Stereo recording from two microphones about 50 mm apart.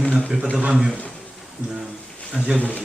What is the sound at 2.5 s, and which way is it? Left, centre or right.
Speech, left.